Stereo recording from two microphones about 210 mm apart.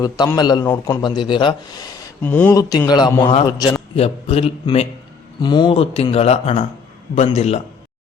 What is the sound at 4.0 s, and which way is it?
A man's voice, 30° left (ahead or behind).